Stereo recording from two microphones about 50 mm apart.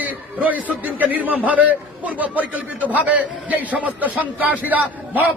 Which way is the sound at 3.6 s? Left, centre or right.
Right.